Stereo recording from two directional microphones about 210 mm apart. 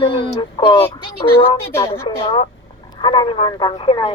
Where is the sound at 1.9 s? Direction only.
25° left (ahead or behind).